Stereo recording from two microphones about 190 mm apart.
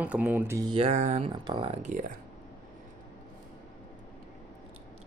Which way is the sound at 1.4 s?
25° right (ahead or behind).